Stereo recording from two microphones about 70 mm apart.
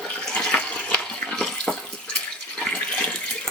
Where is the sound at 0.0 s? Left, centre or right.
Centre.